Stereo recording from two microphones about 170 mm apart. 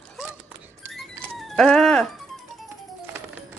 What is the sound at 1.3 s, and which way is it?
Speech, centre (ahead or behind).